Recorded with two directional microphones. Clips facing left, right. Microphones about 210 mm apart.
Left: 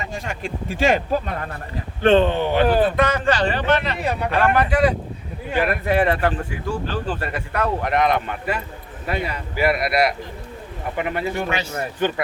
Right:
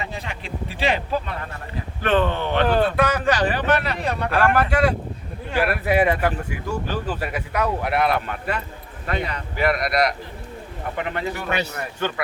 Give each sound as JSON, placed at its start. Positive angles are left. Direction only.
{"t": 0.0, "sound": "speech", "side_deg": 45}
{"t": 2.0, "sound": "speech", "side_deg": 25}
{"t": 3.2, "sound": "speech", "side_deg": -10}
{"t": 3.9, "sound": "speech", "side_deg": 10}